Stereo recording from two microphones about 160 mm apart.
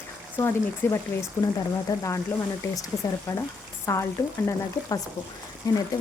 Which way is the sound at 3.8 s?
15° left (ahead or behind).